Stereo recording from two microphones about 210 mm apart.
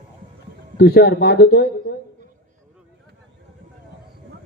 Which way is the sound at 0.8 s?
50° left (ahead or behind).